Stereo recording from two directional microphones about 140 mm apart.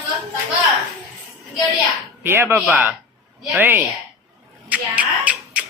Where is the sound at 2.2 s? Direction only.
15° right (ahead or behind).